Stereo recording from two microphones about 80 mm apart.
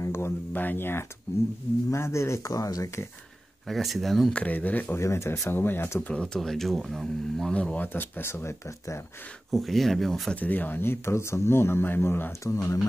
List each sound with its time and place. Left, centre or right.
0.0 s speech: left
3.6 s speech: centre
4.3 s speech: centre
4.9 s speech: left
5.5 s speech: left; by 7.5 s centre
7.5 s speech: centre; by 9.0 s left
9.5 s speech: centre
10.3 s speech: left